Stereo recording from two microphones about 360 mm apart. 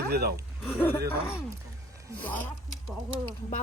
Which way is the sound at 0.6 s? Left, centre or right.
Centre.